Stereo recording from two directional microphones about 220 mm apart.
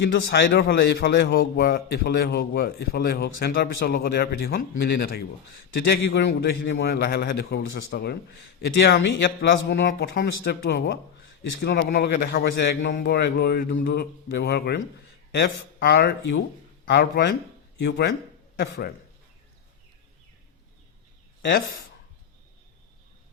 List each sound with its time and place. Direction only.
0.0 s a man's voice: 50° left (ahead or behind)